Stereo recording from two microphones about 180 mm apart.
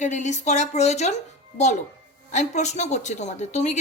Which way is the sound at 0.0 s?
40° left (ahead or behind).